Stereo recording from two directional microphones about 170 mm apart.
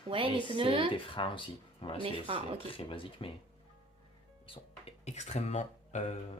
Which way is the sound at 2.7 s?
30° left (ahead or behind).